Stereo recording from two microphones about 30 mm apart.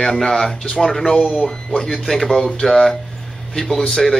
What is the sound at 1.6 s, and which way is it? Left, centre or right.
Speech, left.